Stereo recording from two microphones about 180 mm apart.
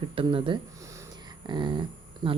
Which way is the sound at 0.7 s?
15° right (ahead or behind).